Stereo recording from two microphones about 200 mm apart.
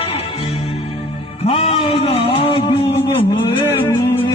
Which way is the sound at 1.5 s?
25° left (ahead or behind).